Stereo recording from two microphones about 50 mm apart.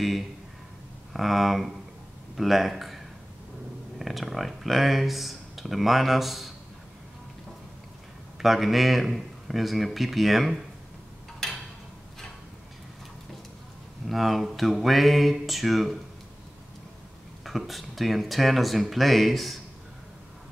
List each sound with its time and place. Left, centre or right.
1.1 s speech: centre
4.0 s speech: centre
8.4 s speech: centre
14.0 s speech: centre
17.5 s speech: centre